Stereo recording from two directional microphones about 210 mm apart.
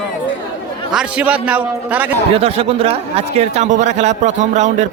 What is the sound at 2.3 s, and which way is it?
A man's voice, 30° right (ahead or behind).